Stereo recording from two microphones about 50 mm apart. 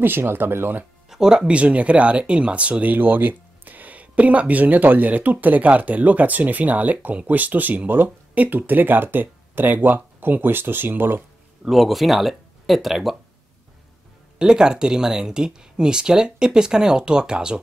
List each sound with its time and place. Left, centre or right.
0.0 s speech: right
1.1 s speech: centre
1.5 s speech: right
11.6 s speech: centre
14.4 s speech: centre